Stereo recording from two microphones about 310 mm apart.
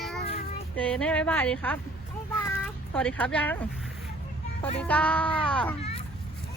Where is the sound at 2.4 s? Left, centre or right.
Centre.